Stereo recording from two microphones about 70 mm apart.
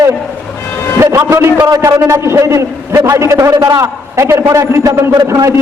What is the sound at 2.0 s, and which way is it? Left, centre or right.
A man's voice, right.